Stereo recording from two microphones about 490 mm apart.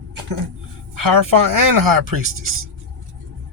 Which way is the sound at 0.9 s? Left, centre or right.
Right.